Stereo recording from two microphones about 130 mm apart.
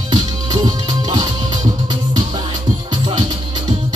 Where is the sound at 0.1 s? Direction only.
35° right (ahead or behind).